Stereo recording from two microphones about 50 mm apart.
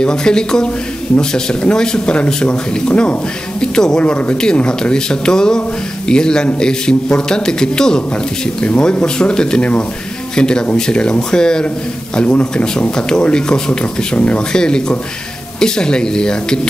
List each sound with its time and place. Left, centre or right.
0.0 s speech: centre